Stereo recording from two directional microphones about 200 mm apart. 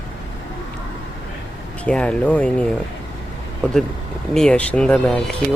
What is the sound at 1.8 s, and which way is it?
Speech, 5° left (ahead or behind).